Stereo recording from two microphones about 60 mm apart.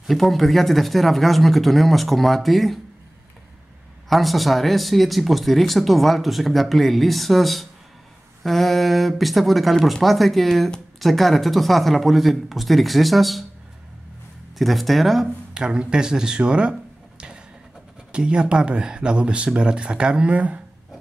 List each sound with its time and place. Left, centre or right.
0.0 s speech: centre
4.1 s speech: centre
14.6 s speech: centre
18.1 s speech: centre